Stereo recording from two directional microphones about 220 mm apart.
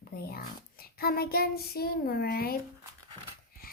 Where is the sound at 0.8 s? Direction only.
45° left (ahead or behind).